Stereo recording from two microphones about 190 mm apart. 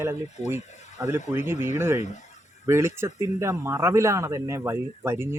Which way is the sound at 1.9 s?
40° left (ahead or behind).